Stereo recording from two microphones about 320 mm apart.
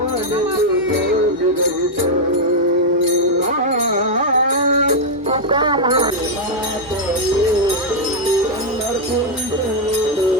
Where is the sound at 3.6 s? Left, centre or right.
Right.